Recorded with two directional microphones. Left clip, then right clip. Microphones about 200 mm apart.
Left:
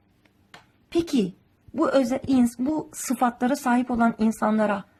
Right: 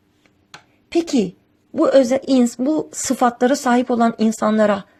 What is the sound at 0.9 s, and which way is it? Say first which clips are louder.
A woman's voice: right 6 dB; 15° right (ahead or behind).